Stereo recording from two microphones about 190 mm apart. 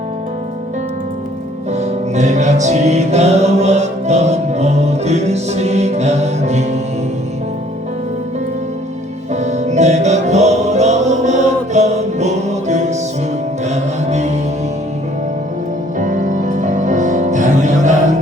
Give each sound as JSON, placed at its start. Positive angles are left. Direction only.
{"t": 2.1, "sound": "music", "side_deg": -40}
{"t": 9.3, "sound": "music", "side_deg": -35}
{"t": 16.0, "sound": "music", "side_deg": -40}